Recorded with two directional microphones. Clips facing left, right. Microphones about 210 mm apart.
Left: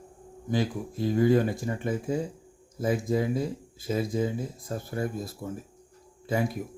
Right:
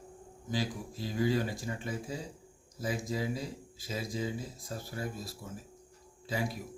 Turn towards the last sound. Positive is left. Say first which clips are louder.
# left 7 dB
turn(degrees=50)  # may be behind; listen again after turning